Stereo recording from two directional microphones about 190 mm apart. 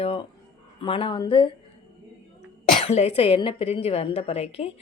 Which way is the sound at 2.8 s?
35° left (ahead or behind).